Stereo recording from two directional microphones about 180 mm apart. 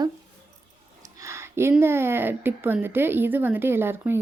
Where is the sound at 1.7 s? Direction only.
15° right (ahead or behind).